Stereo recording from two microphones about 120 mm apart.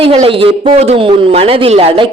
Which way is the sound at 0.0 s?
50° right (ahead or behind).